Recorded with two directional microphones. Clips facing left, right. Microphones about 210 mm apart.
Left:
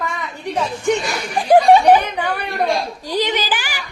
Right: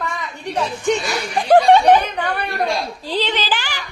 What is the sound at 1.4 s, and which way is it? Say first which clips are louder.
A child's voice: left 1 dB; 10° left (ahead or behind).